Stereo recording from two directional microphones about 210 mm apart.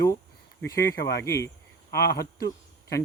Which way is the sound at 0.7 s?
15° left (ahead or behind).